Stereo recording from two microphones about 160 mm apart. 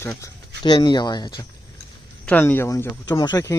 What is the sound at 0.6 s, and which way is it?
Speech, 30° left (ahead or behind).